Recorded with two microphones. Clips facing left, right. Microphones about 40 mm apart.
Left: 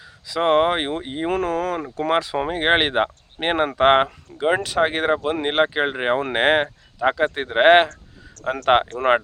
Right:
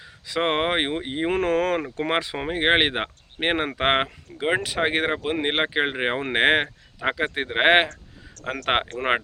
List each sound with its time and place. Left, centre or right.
0.3 s speech: right
1.4 s speech: right
1.8 s speech: right
2.4 s speech: centre